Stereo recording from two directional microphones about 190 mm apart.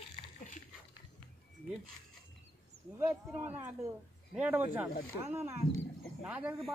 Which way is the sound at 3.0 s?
10° right (ahead or behind).